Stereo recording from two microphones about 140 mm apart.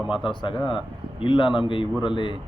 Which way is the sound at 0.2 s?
35° left (ahead or behind).